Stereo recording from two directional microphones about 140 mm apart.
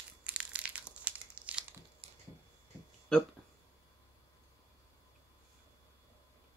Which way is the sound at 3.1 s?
5° left (ahead or behind).